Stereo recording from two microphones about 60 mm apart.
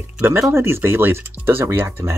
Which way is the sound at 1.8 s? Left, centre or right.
Right.